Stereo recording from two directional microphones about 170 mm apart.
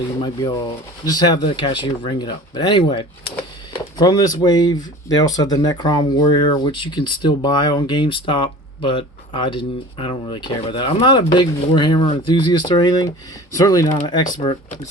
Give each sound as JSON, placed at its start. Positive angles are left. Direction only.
{"t": 0.4, "sound": "speech", "side_deg": 25}